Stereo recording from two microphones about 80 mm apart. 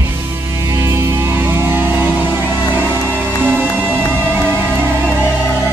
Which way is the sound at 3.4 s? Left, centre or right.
Right.